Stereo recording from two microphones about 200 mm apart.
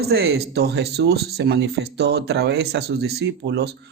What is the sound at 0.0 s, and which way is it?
Speech, 55° right (ahead or behind).